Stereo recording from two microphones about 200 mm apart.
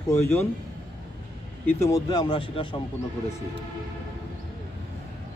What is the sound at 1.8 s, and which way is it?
Speech, 15° left (ahead or behind).